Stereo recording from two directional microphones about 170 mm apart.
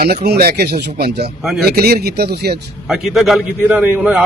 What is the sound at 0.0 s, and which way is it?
Speech, 70° right (ahead or behind).